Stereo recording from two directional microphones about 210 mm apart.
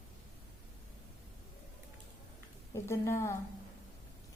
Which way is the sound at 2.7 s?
15° left (ahead or behind).